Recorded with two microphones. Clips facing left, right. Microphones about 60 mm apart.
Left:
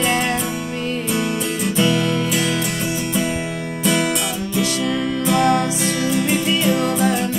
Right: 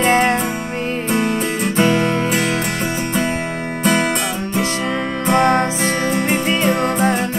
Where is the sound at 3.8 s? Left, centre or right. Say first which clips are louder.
Right 2 dB; right.